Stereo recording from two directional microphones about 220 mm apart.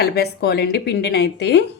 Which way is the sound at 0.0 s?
45° left (ahead or behind).